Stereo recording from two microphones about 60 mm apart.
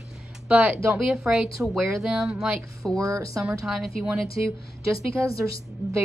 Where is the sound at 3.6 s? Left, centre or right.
Centre.